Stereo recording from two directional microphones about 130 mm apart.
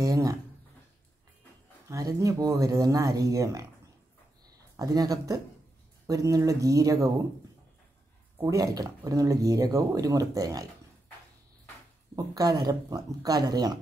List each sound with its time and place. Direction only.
0.0 s a sound: 25° right (ahead or behind)
1.9 s speech: 25° right (ahead or behind)
4.7 s speech: 30° right (ahead or behind)
8.4 s speech: 25° right (ahead or behind)
12.2 s speech: 25° right (ahead or behind)